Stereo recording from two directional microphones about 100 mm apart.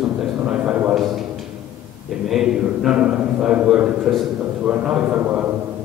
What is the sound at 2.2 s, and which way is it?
A man's voice, 5° right (ahead or behind).